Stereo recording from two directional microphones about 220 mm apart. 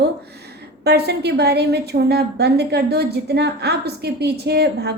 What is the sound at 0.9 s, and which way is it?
A woman's voice, 50° right (ahead or behind).